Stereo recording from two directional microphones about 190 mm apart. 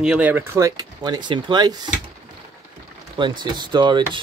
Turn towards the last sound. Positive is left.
turn(degrees=-25)  # may be behind; listen again after turning